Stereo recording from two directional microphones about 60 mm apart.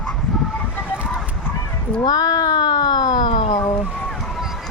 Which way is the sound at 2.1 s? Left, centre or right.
Left.